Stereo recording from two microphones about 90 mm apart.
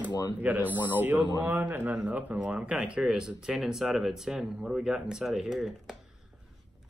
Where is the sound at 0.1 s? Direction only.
50° left (ahead or behind).